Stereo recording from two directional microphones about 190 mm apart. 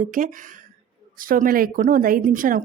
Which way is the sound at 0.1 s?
45° right (ahead or behind).